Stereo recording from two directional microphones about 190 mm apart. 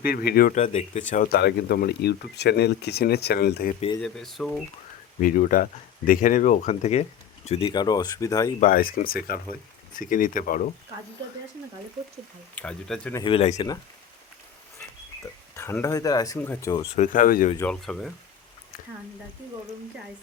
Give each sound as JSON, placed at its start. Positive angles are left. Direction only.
{"t": 0.0, "sound": "speech", "side_deg": 50}
{"t": 4.0, "sound": "speech", "side_deg": 0}
{"t": 5.2, "sound": "speech", "side_deg": 45}
{"t": 8.6, "sound": "speech", "side_deg": 50}
{"t": 12.5, "sound": "speech", "side_deg": 5}
{"t": 13.2, "sound": "speech", "side_deg": 30}
{"t": 15.5, "sound": "speech", "side_deg": 15}
{"t": 16.9, "sound": "speech", "side_deg": 40}
{"t": 17.6, "sound": "speech", "side_deg": 5}